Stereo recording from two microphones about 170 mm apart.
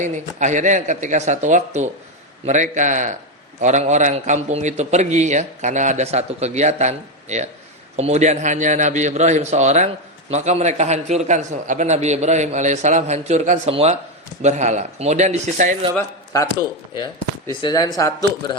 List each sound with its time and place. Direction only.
0.0 s a man's voice: 45° right (ahead or behind)
16.0 s speech: 20° left (ahead or behind)